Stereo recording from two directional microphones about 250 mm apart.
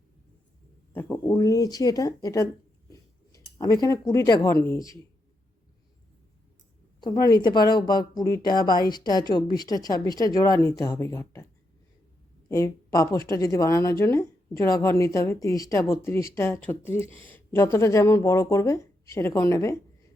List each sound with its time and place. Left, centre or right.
0.9 s a woman's voice: centre
2.9 s a sound: centre
4.6 s a woman's voice: centre
7.0 s a woman's voice: centre
12.5 s a woman's voice: centre